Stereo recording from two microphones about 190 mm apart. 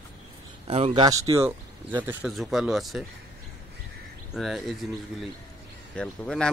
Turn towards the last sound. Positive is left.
turn(degrees=5)  # may be behind; listen again after turning